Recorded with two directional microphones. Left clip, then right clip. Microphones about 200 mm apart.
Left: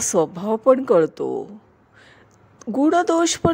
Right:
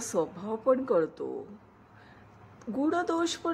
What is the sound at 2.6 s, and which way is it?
Speech, 40° left (ahead or behind).